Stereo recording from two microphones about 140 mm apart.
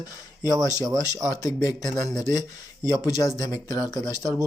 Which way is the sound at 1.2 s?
25° left (ahead or behind).